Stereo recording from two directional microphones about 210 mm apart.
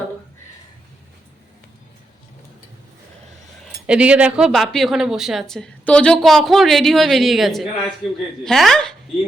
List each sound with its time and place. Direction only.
3.8 s speech: 5° right (ahead or behind)